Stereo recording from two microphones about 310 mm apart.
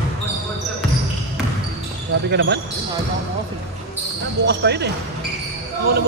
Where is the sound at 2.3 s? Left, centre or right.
Right.